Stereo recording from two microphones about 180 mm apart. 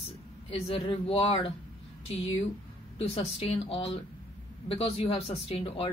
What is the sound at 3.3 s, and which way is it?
Speech, 30° left (ahead or behind).